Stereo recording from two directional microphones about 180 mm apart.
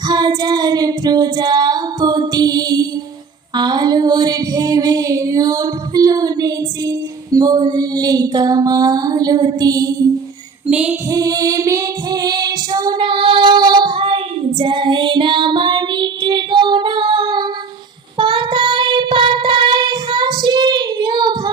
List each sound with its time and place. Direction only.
0.1 s child singing: 20° right (ahead or behind)
3.5 s female singing: 25° right (ahead or behind)
10.7 s female singing: 5° right (ahead or behind)
11.1 s female singing: 20° right (ahead or behind)
14.6 s child singing: 25° right (ahead or behind)